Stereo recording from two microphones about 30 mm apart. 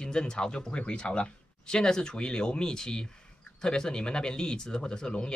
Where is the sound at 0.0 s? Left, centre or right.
Left.